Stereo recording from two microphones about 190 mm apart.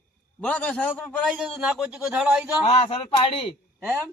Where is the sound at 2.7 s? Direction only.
30° left (ahead or behind).